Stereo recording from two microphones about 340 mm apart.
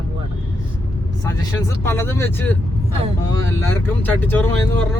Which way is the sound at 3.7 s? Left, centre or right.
Centre.